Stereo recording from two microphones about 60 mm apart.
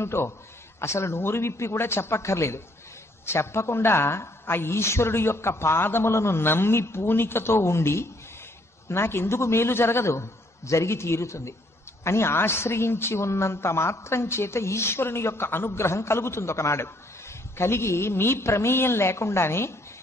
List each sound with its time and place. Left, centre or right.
0.0 s a man's voice: left